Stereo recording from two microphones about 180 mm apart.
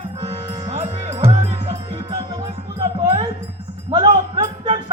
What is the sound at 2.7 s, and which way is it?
A man's voice, 30° right (ahead or behind).